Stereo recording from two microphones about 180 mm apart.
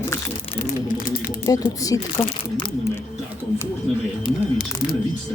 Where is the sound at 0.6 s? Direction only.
55° left (ahead or behind).